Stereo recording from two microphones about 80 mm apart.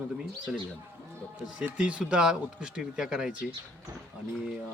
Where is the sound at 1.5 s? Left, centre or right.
Centre.